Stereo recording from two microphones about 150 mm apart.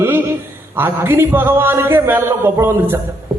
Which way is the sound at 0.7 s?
15° right (ahead or behind).